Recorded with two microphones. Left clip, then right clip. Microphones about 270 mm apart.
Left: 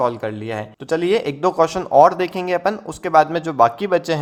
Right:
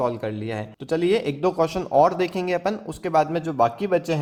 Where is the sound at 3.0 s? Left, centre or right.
Left.